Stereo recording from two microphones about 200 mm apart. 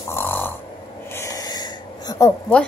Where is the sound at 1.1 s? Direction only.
15° left (ahead or behind).